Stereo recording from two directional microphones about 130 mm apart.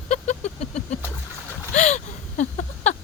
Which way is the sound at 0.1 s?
60° left (ahead or behind).